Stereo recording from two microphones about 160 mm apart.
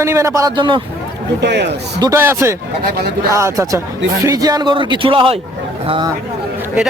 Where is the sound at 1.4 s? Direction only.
90° right.